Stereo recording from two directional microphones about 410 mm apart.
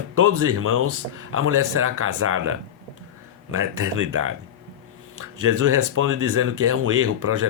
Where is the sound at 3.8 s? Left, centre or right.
Right.